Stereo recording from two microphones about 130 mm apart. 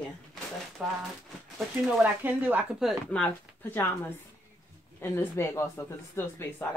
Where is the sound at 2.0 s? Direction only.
15° right (ahead or behind).